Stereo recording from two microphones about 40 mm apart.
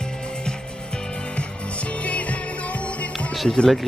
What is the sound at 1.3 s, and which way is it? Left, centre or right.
Music, left.